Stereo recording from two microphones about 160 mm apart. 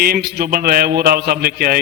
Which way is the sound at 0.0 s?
80° right.